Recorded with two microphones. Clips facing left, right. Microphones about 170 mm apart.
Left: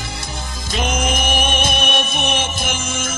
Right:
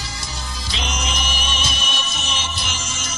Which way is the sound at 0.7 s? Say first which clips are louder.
Left 8 dB; 50° left (ahead or behind).